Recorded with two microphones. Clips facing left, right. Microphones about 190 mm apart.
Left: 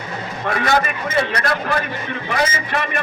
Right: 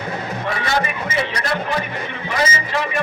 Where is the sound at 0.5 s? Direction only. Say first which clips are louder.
Left 5 dB; 55° left (ahead or behind).